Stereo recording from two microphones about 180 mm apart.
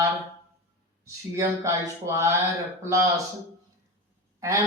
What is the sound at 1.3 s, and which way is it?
Mantra, 15° right (ahead or behind).